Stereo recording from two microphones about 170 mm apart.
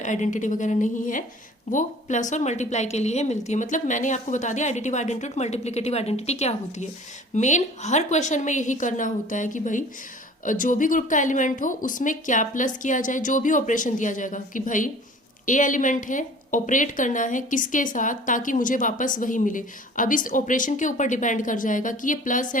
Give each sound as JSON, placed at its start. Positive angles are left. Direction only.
{"t": 0.0, "sound": "speech", "side_deg": 45}